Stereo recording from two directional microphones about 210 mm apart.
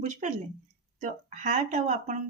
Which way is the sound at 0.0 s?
35° right (ahead or behind).